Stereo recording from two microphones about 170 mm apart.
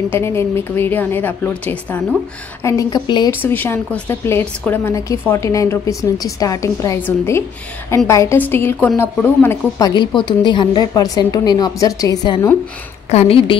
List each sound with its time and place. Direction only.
0.1 s a woman's voice: 15° left (ahead or behind)
2.6 s a woman's voice: 20° left (ahead or behind)
3.3 s a woman's voice: 10° left (ahead or behind)
13.1 s a woman's voice: 35° left (ahead or behind)